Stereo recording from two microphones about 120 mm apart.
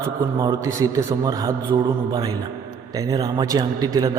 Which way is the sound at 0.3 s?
30° right (ahead or behind).